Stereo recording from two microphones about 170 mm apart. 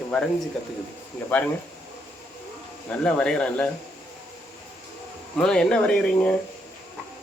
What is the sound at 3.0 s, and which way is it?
Speech, 5° left (ahead or behind).